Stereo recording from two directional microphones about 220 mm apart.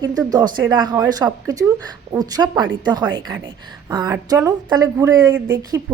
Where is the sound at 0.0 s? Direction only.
15° right (ahead or behind).